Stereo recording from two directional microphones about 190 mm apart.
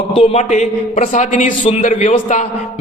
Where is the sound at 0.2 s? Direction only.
35° left (ahead or behind).